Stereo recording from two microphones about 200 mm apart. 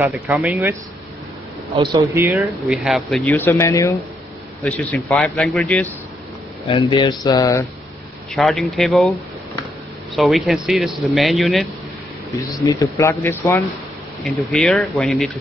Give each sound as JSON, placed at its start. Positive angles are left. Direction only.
{"t": 0.0, "sound": "speech", "side_deg": -5}
{"t": 1.7, "sound": "speech", "side_deg": -25}
{"t": 6.7, "sound": "speech", "side_deg": 25}
{"t": 8.4, "sound": "speech", "side_deg": 0}
{"t": 12.6, "sound": "speech", "side_deg": 15}